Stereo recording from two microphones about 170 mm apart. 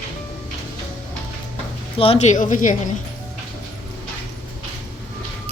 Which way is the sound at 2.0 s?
40° left (ahead or behind).